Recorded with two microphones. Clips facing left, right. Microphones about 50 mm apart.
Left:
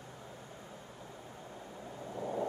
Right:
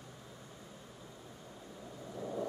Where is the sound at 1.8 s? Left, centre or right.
Left.